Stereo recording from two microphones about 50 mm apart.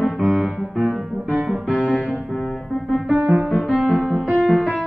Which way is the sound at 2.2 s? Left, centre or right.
Centre.